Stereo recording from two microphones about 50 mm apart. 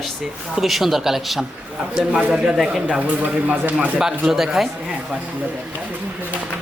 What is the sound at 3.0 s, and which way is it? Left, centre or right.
Speech, right.